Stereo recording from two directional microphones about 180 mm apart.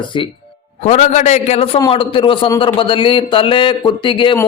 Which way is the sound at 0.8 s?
35° left (ahead or behind).